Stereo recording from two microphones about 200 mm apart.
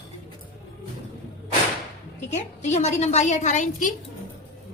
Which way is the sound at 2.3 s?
35° left (ahead or behind).